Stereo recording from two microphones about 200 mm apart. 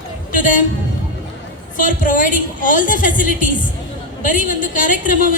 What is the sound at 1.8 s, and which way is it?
Speech, 40° left (ahead or behind).